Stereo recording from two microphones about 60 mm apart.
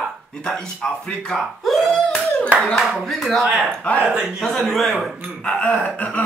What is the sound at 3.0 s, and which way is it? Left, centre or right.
Speech, centre.